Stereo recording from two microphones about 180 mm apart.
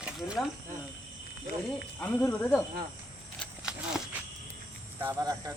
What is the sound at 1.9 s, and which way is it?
Speech, 10° left (ahead or behind).